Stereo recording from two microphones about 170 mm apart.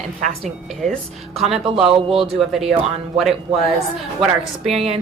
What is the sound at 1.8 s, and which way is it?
Speech, 35° right (ahead or behind).